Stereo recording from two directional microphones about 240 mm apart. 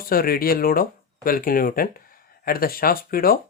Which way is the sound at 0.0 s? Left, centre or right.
Left.